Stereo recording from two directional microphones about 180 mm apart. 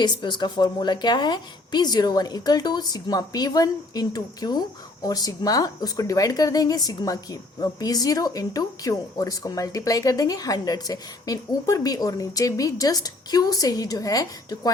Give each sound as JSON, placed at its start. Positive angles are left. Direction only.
{"t": 0.0, "sound": "speech", "side_deg": 25}